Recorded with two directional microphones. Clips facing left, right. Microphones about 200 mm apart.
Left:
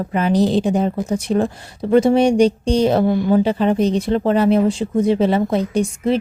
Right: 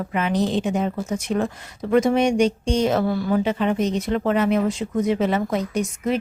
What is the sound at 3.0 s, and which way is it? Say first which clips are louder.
Speech: left 6 dB; 20° left (ahead or behind).